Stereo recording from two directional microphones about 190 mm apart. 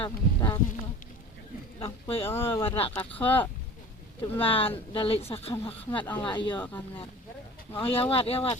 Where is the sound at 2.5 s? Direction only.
30° left (ahead or behind).